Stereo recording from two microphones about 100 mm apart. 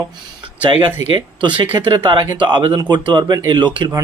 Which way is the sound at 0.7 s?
50° right (ahead or behind).